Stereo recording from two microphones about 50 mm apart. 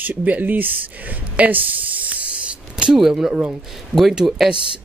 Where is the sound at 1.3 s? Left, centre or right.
Right.